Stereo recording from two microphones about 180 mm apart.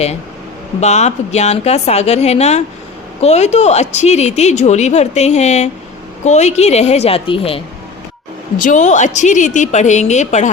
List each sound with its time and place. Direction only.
0.8 s speech: 40° left (ahead or behind)
8.5 s speech: 45° left (ahead or behind)